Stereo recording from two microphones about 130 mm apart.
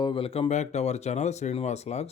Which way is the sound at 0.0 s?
45° left (ahead or behind).